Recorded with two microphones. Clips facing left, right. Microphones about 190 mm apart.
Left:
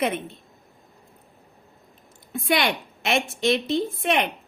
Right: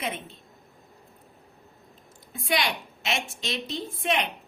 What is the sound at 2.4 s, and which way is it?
A woman's voice, 60° left (ahead or behind).